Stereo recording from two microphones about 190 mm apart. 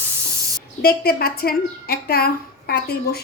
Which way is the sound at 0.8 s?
50° left (ahead or behind).